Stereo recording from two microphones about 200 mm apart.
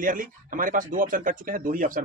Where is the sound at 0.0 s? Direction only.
45° right (ahead or behind).